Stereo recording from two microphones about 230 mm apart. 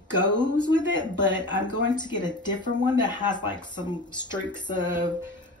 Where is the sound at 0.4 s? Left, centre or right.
Centre.